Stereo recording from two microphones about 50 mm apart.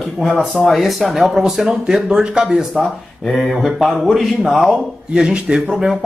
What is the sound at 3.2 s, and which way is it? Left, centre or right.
Speech, centre.